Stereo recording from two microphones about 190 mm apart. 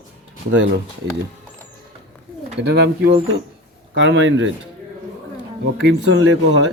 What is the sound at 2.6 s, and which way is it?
Speech, 65° right (ahead or behind).